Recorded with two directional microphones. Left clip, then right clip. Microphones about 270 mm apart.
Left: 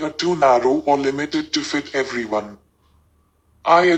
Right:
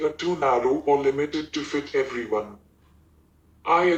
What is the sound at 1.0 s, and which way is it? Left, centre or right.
Speech, left.